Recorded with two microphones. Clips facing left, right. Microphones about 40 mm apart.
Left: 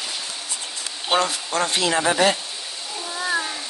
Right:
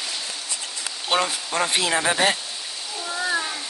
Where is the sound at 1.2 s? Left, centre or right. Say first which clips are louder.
Left 1 dB; centre.